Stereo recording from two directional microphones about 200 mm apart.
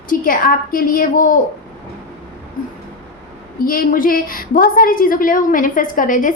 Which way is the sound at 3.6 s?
45° left (ahead or behind).